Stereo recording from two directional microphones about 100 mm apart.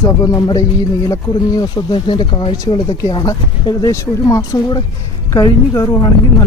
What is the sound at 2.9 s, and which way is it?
Speech, 30° left (ahead or behind).